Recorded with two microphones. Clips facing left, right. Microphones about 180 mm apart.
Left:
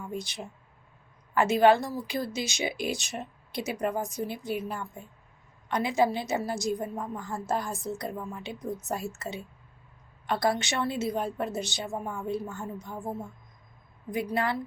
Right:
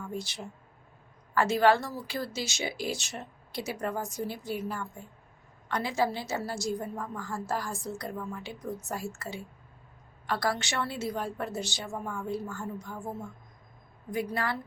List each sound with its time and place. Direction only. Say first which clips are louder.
0.1 s a woman's voice: left 1 dB; 20° left (ahead or behind)
14.1 s a woman's voice: left 3 dB; 20° left (ahead or behind)